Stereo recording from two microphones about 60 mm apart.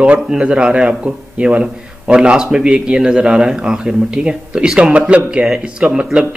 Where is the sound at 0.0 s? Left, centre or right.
Centre.